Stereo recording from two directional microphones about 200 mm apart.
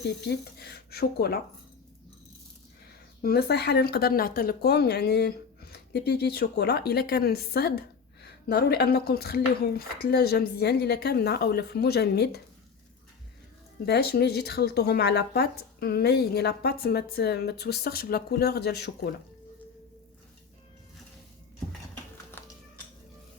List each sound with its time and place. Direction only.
0.0 s speech: 55° left (ahead or behind)
3.2 s speech: 50° left (ahead or behind)
13.8 s speech: 55° left (ahead or behind)
22.4 s cat: 10° left (ahead or behind)